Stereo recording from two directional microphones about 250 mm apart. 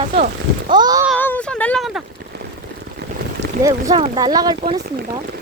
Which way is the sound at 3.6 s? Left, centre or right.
Centre.